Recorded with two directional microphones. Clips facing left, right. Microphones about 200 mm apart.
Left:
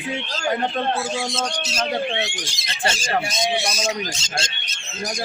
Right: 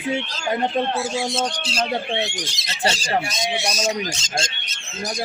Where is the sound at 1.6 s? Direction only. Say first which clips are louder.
Right 1 dB; 30° right (ahead or behind).